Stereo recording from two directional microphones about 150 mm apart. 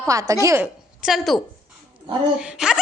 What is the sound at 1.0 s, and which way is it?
Speech, centre (ahead or behind).